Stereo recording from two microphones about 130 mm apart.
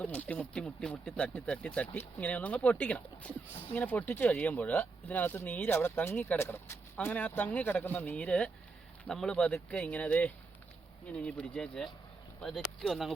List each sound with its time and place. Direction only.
0.0 s speech: 10° left (ahead or behind)